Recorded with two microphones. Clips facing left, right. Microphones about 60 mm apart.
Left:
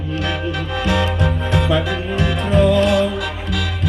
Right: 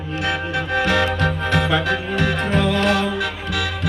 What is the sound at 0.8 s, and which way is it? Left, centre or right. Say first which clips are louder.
Music: right 1 dB; right.